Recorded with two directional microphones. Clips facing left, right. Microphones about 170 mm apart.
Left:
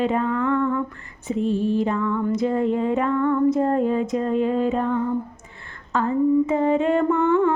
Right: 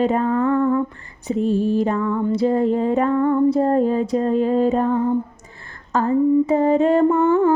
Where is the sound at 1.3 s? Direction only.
40° right (ahead or behind).